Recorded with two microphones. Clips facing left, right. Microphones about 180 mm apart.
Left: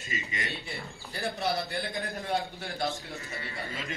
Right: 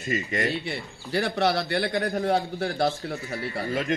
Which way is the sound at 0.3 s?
70° right (ahead or behind).